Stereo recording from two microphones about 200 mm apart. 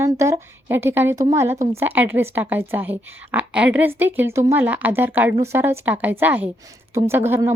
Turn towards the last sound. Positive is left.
turn(degrees=-10)  # may be behind; listen again after turning